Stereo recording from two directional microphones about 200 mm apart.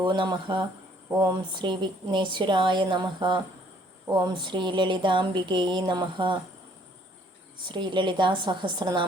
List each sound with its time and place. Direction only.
0.0 s speech: 25° right (ahead or behind)
7.7 s speech: 25° right (ahead or behind)